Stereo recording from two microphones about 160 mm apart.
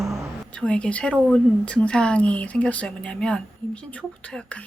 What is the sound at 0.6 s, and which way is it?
Speech, 10° left (ahead or behind).